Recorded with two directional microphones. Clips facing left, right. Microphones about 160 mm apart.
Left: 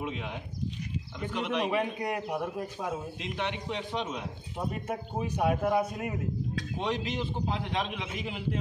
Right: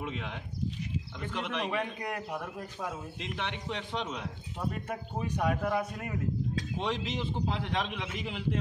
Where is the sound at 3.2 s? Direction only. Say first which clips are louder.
Left 3 dB; 5° left (ahead or behind).